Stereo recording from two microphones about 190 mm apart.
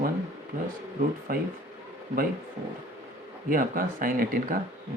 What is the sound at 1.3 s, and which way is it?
Speech, 50° right (ahead or behind).